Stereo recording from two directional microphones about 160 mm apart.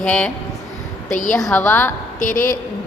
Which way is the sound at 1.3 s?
5° left (ahead or behind).